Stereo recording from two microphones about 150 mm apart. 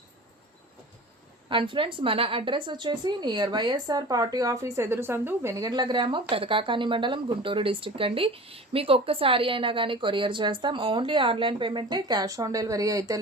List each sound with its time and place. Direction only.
1.5 s a woman's voice: 35° right (ahead or behind)